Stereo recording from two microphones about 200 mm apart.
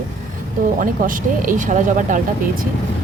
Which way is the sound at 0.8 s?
40° right (ahead or behind).